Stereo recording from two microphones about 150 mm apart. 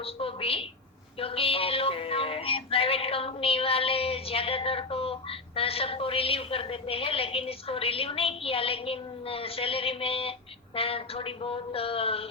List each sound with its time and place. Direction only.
0.0 s music: 40° left (ahead or behind)